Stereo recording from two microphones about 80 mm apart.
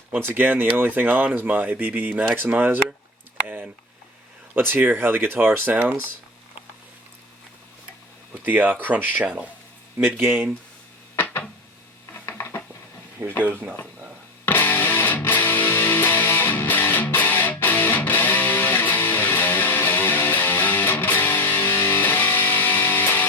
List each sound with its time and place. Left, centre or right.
0.1 s speech: right
8.4 s speech: right
12.4 s a sound: left
13.2 s speech: right
14.4 s music: left